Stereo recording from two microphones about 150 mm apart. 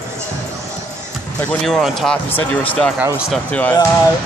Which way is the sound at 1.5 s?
5° left (ahead or behind).